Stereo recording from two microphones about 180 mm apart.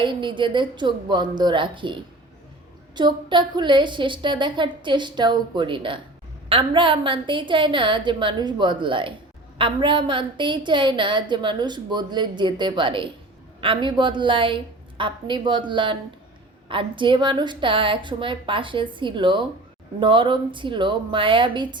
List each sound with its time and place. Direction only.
0.0 s a woman's voice: 25° right (ahead or behind)